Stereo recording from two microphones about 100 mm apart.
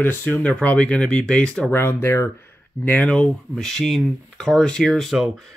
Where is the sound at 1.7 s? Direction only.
25° left (ahead or behind).